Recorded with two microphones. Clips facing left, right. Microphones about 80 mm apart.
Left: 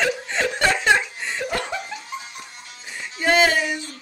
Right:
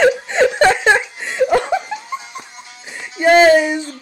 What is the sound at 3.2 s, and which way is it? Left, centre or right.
Music, right.